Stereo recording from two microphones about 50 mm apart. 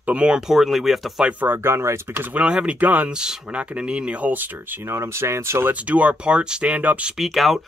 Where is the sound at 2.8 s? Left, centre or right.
Right.